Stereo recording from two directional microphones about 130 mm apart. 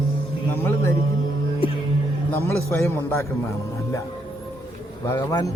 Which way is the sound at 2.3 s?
20° left (ahead or behind).